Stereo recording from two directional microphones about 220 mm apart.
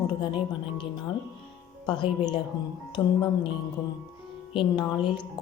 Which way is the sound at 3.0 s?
5° left (ahead or behind).